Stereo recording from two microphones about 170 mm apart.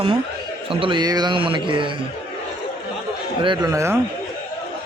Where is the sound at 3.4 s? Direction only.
25° right (ahead or behind).